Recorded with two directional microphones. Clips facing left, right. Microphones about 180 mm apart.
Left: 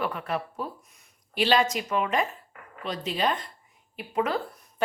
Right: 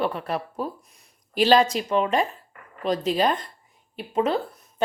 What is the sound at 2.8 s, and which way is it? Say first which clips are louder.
Speech: right 6 dB; 40° right (ahead or behind).